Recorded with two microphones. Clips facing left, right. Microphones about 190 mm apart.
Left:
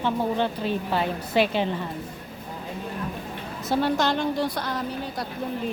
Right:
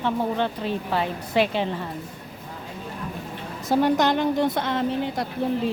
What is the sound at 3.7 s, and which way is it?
A woman's voice, 15° right (ahead or behind).